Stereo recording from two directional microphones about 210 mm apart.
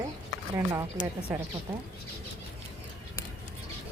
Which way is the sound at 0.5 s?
15° right (ahead or behind).